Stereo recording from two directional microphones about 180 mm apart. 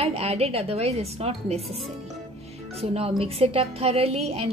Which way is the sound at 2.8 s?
35° right (ahead or behind).